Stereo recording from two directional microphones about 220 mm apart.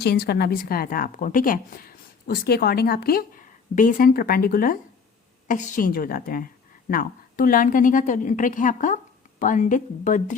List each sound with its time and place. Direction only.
0.0 s a woman's voice: 45° left (ahead or behind)